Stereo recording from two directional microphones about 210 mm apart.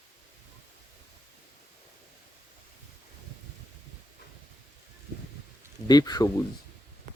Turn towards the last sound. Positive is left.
turn(degrees=20)  # may be behind; listen again after turning